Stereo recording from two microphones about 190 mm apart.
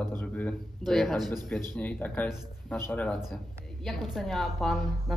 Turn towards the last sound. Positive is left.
turn(degrees=0)  # may be behind; listen again after turning